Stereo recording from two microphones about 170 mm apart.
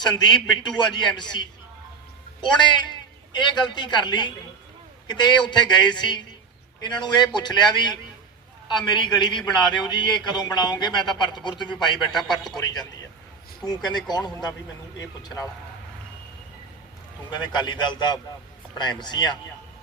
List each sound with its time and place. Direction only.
0.0 s a man's voice: 25° left (ahead or behind)
17.2 s a man's voice: 25° left (ahead or behind)